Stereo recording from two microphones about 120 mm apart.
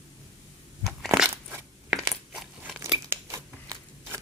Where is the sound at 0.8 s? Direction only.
Centre (ahead or behind).